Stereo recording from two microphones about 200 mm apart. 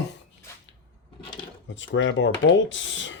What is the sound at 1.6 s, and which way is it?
Speech, 70° left (ahead or behind).